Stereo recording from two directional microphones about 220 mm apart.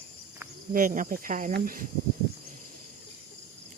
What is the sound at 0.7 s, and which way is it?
Speech, 35° right (ahead or behind).